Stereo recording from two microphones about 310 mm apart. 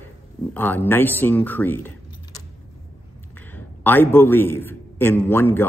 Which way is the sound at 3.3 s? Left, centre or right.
Centre.